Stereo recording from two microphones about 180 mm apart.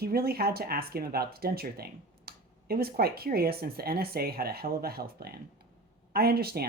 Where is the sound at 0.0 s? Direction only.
60° right (ahead or behind).